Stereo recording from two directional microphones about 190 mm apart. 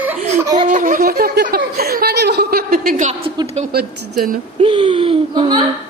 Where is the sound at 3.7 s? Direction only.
55° right (ahead or behind).